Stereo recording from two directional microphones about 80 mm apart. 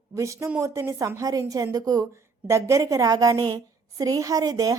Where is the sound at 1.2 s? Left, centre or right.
Right.